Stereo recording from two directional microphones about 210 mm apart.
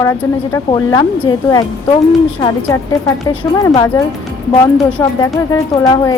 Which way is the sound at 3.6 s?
15° left (ahead or behind).